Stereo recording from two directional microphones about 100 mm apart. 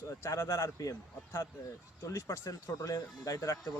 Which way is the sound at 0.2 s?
25° left (ahead or behind).